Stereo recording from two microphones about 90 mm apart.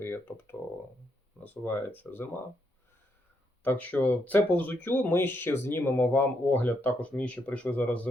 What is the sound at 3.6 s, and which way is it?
Speech, 15° left (ahead or behind).